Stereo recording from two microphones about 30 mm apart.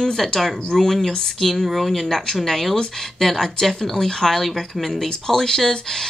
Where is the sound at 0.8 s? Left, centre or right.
Centre.